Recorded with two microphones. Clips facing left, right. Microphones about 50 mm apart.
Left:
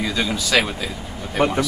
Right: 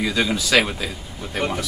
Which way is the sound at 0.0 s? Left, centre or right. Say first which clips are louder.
Right 1 dB; centre.